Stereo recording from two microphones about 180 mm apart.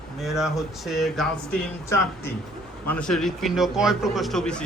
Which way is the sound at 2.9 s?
5° left (ahead or behind).